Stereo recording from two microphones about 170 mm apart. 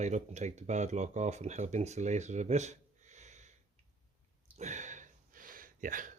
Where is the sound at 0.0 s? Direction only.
40° right (ahead or behind).